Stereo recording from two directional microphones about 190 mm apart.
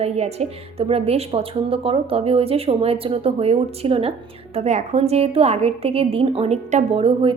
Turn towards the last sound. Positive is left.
turn(degrees=-30)  # may be behind; listen again after turning